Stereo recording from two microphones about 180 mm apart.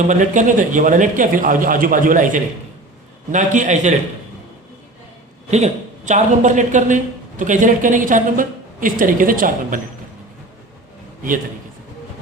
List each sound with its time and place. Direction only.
0.1 s speech: 45° right (ahead or behind)
5.5 s speech: 40° right (ahead or behind)